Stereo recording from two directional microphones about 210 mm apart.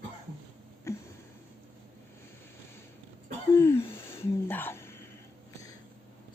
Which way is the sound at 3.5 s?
15° left (ahead or behind).